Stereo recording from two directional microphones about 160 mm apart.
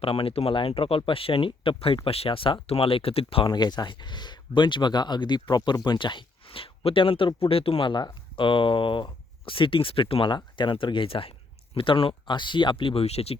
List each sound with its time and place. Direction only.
0.0 s speech: 35° left (ahead or behind)